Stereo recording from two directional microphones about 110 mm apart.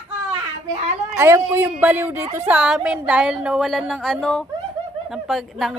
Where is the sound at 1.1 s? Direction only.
25° right (ahead or behind).